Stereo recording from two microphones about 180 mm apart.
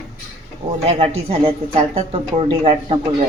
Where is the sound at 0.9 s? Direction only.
35° right (ahead or behind).